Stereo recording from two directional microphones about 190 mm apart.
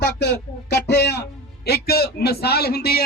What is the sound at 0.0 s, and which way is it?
A man's voice, 60° left (ahead or behind).